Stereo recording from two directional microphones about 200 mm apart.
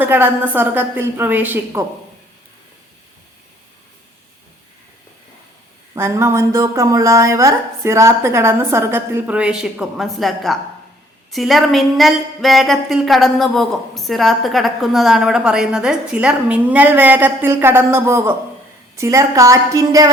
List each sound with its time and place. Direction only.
0.0 s a woman's voice: 10° right (ahead or behind)
5.9 s a woman's voice: 15° right (ahead or behind)